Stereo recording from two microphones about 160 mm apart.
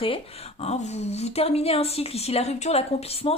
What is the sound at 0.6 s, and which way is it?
A woman's voice, 45° left (ahead or behind).